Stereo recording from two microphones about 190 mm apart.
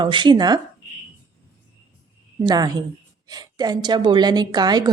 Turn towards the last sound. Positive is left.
turn(degrees=-20)  # may be behind; listen again after turning